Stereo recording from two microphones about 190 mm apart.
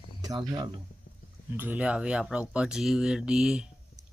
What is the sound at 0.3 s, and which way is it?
Speech, 20° right (ahead or behind).